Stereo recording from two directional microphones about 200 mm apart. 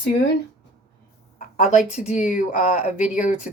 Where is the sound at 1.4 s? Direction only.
40° left (ahead or behind).